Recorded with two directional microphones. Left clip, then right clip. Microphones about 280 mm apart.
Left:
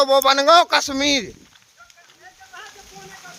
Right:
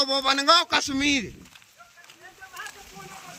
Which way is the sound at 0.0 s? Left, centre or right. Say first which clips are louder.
Left 8 dB; centre.